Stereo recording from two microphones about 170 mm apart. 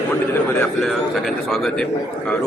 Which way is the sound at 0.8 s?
Centre (ahead or behind).